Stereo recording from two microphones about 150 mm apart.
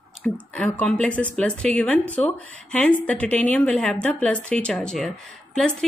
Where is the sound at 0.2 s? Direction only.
10° left (ahead or behind).